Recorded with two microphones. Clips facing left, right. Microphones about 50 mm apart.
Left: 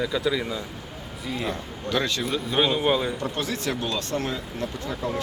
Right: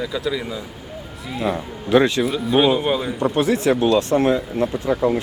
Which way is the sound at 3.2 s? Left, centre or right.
Right.